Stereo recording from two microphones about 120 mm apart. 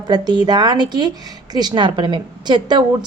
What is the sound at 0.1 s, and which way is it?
A woman's voice, 35° right (ahead or behind).